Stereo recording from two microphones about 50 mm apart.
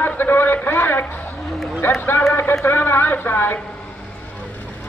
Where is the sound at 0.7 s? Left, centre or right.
Left.